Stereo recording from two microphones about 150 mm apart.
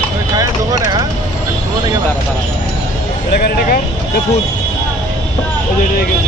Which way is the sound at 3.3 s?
90° left.